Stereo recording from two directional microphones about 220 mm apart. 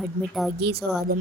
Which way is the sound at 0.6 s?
45° right (ahead or behind).